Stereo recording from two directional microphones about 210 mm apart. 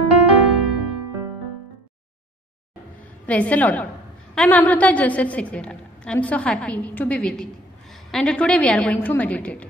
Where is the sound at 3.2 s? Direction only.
5° left (ahead or behind).